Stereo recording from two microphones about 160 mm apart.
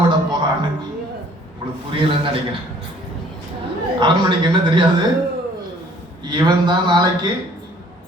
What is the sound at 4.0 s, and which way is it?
Speech, 30° right (ahead or behind).